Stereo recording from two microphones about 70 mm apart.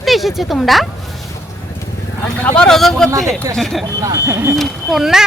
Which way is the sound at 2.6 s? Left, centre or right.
Centre.